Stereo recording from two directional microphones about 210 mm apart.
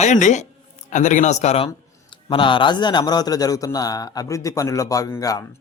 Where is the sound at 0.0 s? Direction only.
35° left (ahead or behind).